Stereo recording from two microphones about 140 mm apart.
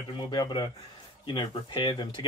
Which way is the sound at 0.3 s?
35° left (ahead or behind).